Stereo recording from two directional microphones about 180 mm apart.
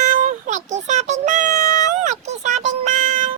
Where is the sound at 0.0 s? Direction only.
45° right (ahead or behind).